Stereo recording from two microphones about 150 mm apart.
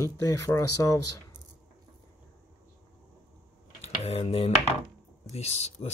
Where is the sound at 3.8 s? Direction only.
40° left (ahead or behind).